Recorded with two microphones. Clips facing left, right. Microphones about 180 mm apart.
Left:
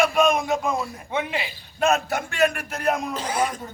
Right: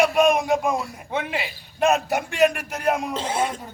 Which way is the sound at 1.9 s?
15° right (ahead or behind).